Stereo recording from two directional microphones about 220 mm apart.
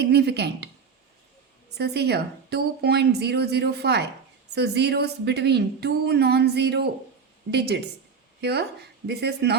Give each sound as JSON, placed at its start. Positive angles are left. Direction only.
{"t": 0.0, "sound": "a woman's voice", "side_deg": -50}
{"t": 1.8, "sound": "a woman's voice", "side_deg": -50}